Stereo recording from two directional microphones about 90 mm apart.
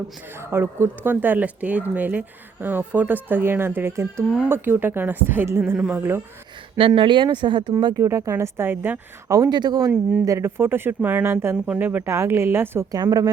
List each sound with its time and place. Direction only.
0.3 s speech: 25° right (ahead or behind)
5.7 s speech: 5° right (ahead or behind)
6.0 s speech: 25° right (ahead or behind)
6.7 s speech: 80° right; by 7.7 s 65° right (ahead or behind)
7.9 s a woman's voice: 35° right (ahead or behind)
9.3 s speech: 50° right (ahead or behind)
9.9 s speech: 15° right (ahead or behind)
10.2 s speech: 30° right (ahead or behind)
11.5 s speech: 10° right (ahead or behind)
12.9 s speech: 45° right (ahead or behind)